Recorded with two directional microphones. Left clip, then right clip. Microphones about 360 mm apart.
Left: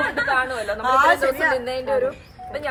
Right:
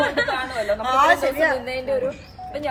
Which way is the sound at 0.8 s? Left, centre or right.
Centre.